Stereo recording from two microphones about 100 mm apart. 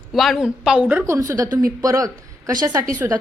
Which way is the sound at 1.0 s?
30° right (ahead or behind).